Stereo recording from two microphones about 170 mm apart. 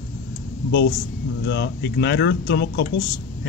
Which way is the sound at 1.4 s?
85° left.